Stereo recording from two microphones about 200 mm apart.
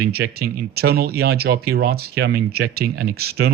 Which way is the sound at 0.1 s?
50° right (ahead or behind).